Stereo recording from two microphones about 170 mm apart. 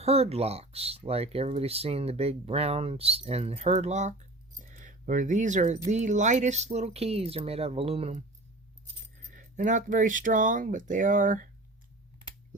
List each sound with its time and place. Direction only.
0.0 s speech: 35° right (ahead or behind)
9.3 s speech: 50° right (ahead or behind)